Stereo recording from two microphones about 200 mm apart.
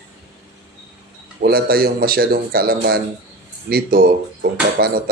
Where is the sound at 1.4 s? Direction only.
50° right (ahead or behind).